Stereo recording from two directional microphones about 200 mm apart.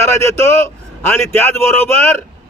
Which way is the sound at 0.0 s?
15° left (ahead or behind).